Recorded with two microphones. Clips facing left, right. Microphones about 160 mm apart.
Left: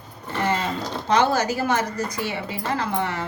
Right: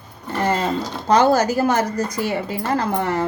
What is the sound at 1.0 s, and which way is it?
Speech, 40° right (ahead or behind).